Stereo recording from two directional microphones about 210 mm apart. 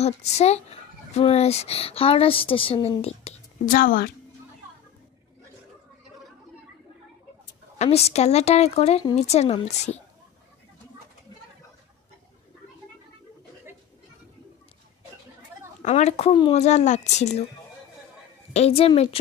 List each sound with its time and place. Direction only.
0.0 s speech: 30° left (ahead or behind)
3.7 s a woman's voice: 45° left (ahead or behind)
7.8 s a woman's voice: 30° left (ahead or behind)
15.8 s a woman's voice: 30° left (ahead or behind)
18.5 s speech: 30° left (ahead or behind)